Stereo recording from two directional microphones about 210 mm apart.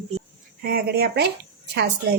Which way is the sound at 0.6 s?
45° right (ahead or behind).